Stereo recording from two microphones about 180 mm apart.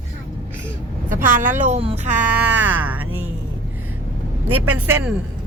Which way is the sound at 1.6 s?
40° right (ahead or behind).